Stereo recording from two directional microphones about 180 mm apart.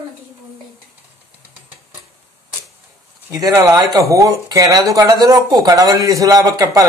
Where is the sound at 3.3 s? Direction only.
20° right (ahead or behind).